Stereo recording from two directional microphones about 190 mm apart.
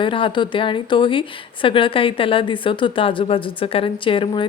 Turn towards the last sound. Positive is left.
turn(degrees=25)  # may be behind; listen again after turning